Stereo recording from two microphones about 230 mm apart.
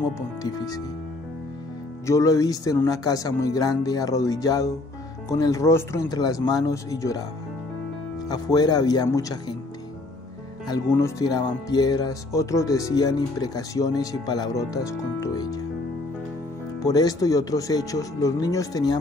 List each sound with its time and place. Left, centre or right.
0.4 s speech: centre
2.0 s speech: centre
8.3 s speech: centre
10.7 s speech: centre
16.8 s speech: centre